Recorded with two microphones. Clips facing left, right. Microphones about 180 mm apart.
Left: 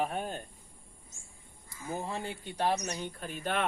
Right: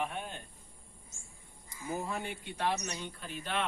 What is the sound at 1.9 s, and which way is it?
Speech, 30° left (ahead or behind).